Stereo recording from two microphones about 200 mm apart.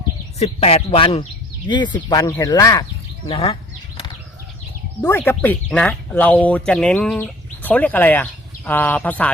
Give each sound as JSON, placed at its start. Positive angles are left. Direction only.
{"t": 0.3, "sound": "speech", "side_deg": 30}
{"t": 3.2, "sound": "a sound", "side_deg": 25}
{"t": 5.0, "sound": "speech", "side_deg": 10}